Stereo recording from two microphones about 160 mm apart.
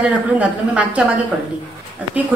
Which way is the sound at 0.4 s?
10° right (ahead or behind).